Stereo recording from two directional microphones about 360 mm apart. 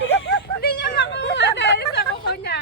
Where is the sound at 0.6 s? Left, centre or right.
Left.